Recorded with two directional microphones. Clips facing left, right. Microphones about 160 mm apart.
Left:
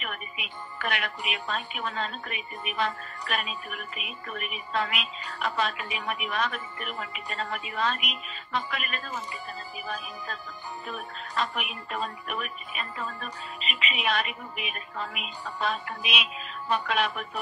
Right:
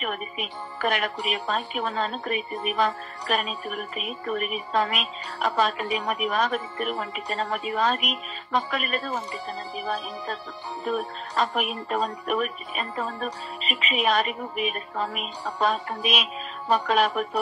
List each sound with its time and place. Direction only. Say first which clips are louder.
0.0 s speech: right 8 dB; 40° right (ahead or behind)